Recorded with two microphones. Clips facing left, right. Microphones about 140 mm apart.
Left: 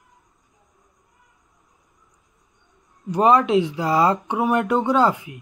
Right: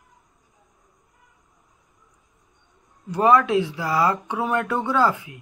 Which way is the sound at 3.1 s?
20° left (ahead or behind).